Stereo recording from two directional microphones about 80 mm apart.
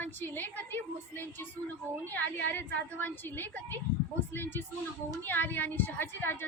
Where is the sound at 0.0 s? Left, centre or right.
Left.